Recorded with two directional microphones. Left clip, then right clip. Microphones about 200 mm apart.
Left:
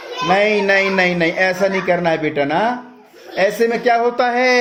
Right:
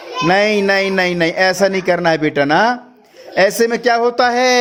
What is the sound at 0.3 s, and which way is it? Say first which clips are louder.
A man's voice: right 1 dB; 45° right (ahead or behind).